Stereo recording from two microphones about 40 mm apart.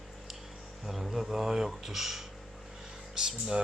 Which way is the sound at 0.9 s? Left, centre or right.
Centre.